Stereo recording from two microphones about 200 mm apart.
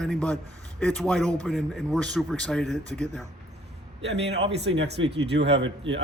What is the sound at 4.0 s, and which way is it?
Speech, 60° right (ahead or behind).